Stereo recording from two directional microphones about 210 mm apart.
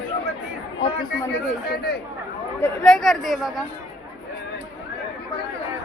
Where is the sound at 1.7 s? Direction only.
50° left (ahead or behind).